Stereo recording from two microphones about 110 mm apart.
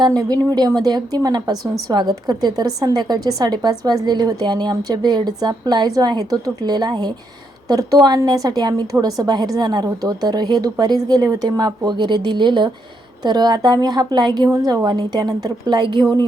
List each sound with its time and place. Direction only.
0.2 s a woman's voice: 35° right (ahead or behind)